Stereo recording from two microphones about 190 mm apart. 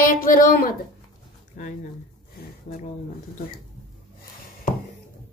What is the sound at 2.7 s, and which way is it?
Speech, 40° left (ahead or behind).